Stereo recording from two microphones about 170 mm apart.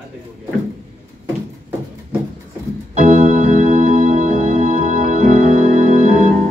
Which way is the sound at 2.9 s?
45° right (ahead or behind).